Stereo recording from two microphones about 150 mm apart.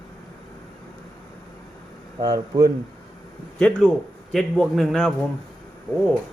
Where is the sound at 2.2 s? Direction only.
25° right (ahead or behind).